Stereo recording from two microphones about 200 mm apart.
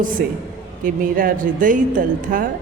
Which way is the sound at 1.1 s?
40° right (ahead or behind).